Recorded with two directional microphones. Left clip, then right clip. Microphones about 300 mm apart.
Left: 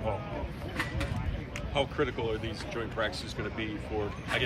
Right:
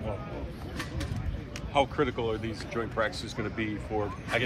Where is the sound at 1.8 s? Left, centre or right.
Right.